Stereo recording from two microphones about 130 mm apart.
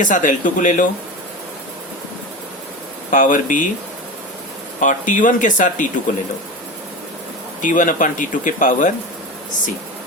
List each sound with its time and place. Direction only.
0.0 s speech: 85° left
3.1 s speech: 85° left
4.8 s speech: 80° left
7.6 s speech: 85° left